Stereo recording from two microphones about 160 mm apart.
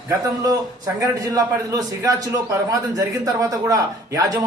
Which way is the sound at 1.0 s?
20° right (ahead or behind).